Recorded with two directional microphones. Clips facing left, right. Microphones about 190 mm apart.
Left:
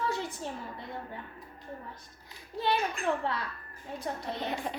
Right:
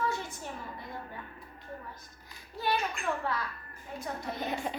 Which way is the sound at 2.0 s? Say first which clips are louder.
Left 1 dB; 30° left (ahead or behind).